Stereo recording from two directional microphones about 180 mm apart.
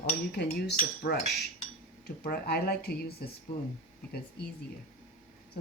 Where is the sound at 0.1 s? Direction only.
60° left (ahead or behind).